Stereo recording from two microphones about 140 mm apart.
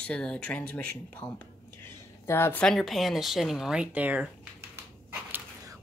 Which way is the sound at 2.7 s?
Centre (ahead or behind).